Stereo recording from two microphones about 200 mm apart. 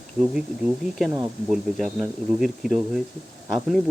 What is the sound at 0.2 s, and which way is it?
Speech, 5° right (ahead or behind).